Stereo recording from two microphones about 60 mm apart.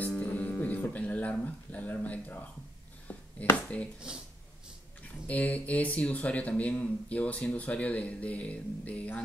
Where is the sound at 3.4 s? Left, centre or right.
Left.